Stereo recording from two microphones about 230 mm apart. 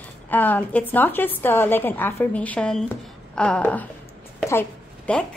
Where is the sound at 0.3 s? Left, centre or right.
Centre.